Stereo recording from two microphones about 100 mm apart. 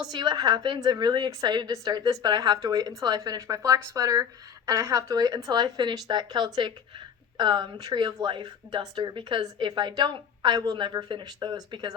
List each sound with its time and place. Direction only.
0.1 s a woman's voice: 45° right (ahead or behind)